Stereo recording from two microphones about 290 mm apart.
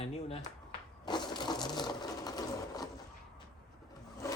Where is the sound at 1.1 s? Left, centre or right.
Centre.